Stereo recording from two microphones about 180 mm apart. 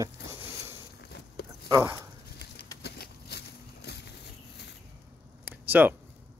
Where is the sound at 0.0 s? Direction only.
15° right (ahead or behind).